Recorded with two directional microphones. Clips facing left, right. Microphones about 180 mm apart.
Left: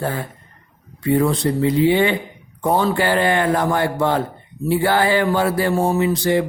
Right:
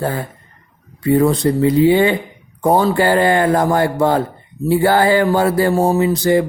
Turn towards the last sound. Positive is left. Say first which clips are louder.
# right 3 dB
turn(degrees=-40)  # may be behind; listen again after turning